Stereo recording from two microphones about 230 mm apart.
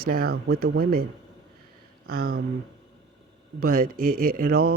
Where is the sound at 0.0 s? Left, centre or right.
Right.